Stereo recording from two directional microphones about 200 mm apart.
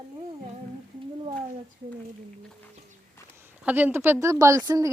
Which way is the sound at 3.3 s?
10° right (ahead or behind).